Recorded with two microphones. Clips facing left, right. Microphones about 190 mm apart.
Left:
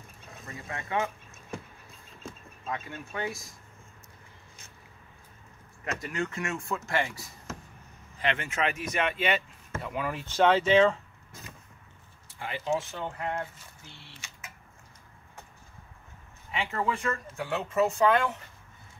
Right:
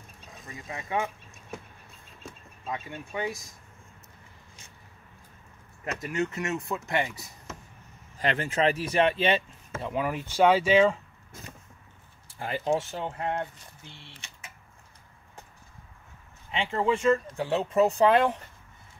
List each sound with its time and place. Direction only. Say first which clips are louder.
0.7 s speech: even; 15° right (ahead or behind)
2.7 s speech: right 1 dB; 15° right (ahead or behind)
6.1 s speech: right 5 dB; 20° right (ahead or behind)
8.2 s speech: right 4 dB; 35° right (ahead or behind)
9.8 s speech: right 3 dB; 20° right (ahead or behind)
12.4 s speech: right 3 dB; 40° right (ahead or behind)
16.5 s speech: right 4 dB; 25° right (ahead or behind)